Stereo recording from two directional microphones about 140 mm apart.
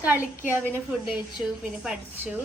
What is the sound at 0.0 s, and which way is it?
Speech, 15° right (ahead or behind).